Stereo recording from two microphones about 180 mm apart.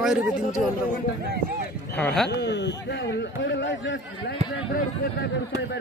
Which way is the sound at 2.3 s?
75° left (ahead or behind).